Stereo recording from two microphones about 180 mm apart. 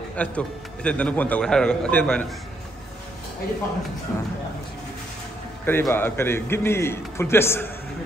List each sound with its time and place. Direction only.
0.1 s a man's voice: 5° left (ahead or behind)
4.1 s a man's voice: 15° left (ahead or behind)
5.7 s a man's voice: 10° left (ahead or behind)